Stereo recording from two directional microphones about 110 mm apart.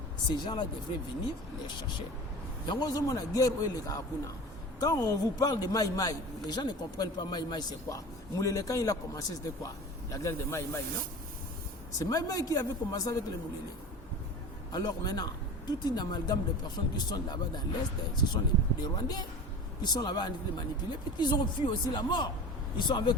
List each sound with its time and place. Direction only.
0.3 s speech: 40° left (ahead or behind)
2.6 s a man's voice: 35° left (ahead or behind)
11.9 s a man's voice: 35° left (ahead or behind)
14.7 s a man's voice: 35° left (ahead or behind)